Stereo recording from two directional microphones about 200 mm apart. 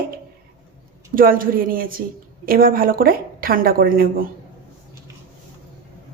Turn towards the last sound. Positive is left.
turn(degrees=-45)  # may be behind; listen again after turning